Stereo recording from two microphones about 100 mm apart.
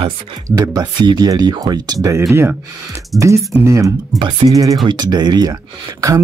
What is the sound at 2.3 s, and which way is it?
Speech, 25° right (ahead or behind).